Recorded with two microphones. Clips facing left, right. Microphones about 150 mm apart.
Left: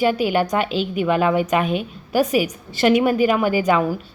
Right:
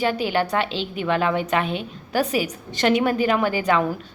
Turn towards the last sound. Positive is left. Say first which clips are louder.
# left 2 dB
turn(degrees=10)  # may be behind; listen again after turning